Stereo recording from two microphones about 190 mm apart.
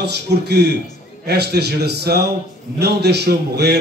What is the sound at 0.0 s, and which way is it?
A man's voice, 60° right (ahead or behind).